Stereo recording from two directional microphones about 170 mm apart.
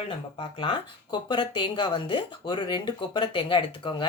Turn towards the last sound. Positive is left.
turn(degrees=30)  # may be behind; listen again after turning